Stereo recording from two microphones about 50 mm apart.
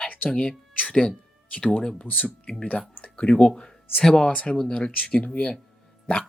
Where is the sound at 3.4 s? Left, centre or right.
Centre.